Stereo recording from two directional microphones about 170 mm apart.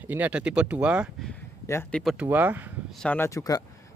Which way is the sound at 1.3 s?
10° left (ahead or behind).